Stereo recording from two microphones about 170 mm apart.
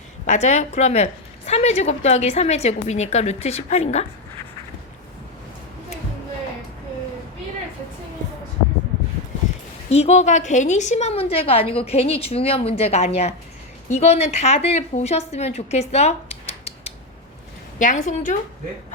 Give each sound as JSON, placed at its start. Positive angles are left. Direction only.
{"t": 0.3, "sound": "a woman's voice", "side_deg": 45}
{"t": 9.9, "sound": "a woman's voice", "side_deg": 40}
{"t": 17.7, "sound": "a woman's voice", "side_deg": 45}